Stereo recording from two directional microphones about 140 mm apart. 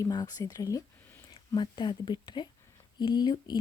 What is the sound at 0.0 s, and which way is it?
A woman's voice, 30° left (ahead or behind).